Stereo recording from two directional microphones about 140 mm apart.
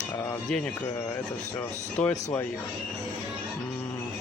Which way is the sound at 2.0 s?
20° left (ahead or behind).